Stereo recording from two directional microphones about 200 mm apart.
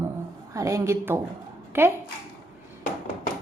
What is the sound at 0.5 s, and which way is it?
A woman's voice, 15° right (ahead or behind).